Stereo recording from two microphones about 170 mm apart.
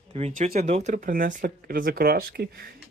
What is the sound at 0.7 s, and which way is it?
Speech, 45° right (ahead or behind).